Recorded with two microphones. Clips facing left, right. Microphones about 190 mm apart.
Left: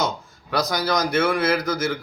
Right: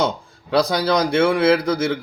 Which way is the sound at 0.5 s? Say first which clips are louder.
Right 5 dB; 30° right (ahead or behind).